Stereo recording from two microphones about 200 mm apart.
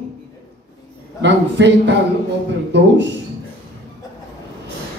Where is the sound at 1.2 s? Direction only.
60° right (ahead or behind).